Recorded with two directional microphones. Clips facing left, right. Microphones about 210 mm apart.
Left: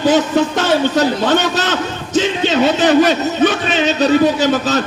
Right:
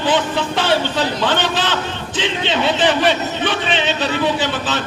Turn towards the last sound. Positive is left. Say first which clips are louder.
# left 5 dB
turn(degrees=40)  # may be behind; listen again after turning